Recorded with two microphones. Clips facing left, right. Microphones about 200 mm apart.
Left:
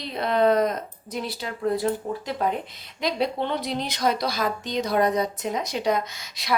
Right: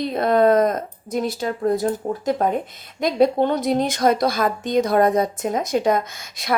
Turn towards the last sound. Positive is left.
turn(degrees=-50)  # may be behind; listen again after turning